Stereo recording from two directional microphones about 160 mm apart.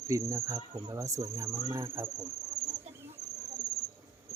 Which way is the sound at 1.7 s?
15° right (ahead or behind).